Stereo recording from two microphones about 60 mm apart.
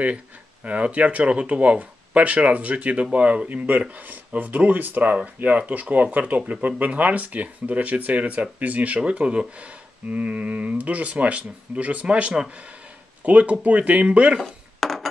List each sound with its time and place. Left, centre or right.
0.7 s speech: right
14.4 s dishes: centre